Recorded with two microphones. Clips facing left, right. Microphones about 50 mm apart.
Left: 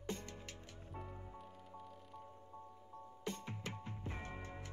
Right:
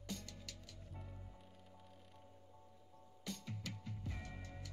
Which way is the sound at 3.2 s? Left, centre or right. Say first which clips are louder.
Left 3 dB; left.